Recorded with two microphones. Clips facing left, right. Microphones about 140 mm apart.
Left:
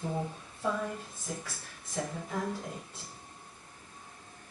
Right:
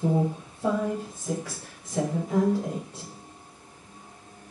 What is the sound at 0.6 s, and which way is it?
A woman's voice, 15° right (ahead or behind).